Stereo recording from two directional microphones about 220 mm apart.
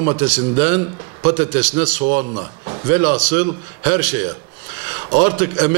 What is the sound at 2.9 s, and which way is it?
A man's voice, 15° right (ahead or behind).